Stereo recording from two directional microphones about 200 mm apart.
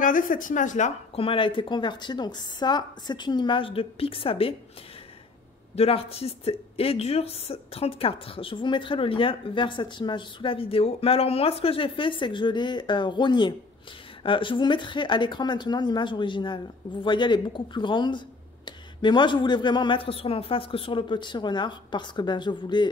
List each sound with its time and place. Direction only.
0.0 s speech: 40° left (ahead or behind)
5.8 s speech: 30° left (ahead or behind)